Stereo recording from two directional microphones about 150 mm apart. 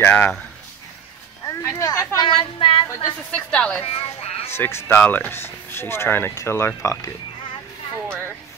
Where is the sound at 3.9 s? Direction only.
45° left (ahead or behind).